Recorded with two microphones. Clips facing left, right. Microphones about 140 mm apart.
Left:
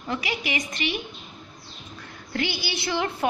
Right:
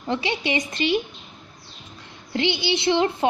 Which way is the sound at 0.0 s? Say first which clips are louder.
Right 4 dB; 30° right (ahead or behind).